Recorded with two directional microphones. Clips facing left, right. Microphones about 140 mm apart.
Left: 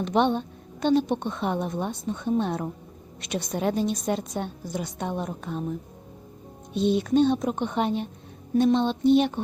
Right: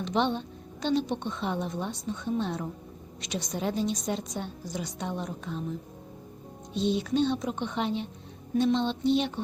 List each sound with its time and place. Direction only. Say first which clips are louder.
0.0 s a woman's voice: left 5 dB; 55° left (ahead or behind)
6.7 s a woman's voice: left 5 dB; 55° left (ahead or behind)